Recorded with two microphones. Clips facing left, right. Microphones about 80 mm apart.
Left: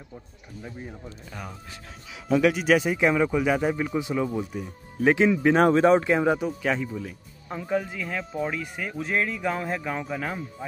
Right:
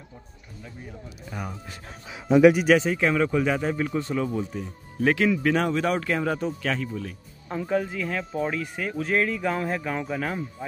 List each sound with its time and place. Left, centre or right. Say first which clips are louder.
1.3 s a man's voice: right 5 dB; centre
2.6 s speech: right 1 dB; centre
2.9 s speech: left 1 dB; centre
5.1 s speech: left 3 dB; left
5.6 s speech: left 6 dB; left; by 10.4 s centre